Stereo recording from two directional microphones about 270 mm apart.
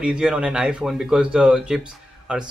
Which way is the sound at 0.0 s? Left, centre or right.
Centre.